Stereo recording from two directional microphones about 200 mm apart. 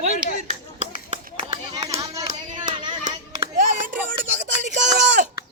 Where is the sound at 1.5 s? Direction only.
20° right (ahead or behind).